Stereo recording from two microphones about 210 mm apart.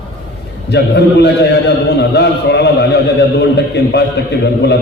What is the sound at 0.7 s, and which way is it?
A man's voice, 55° left (ahead or behind).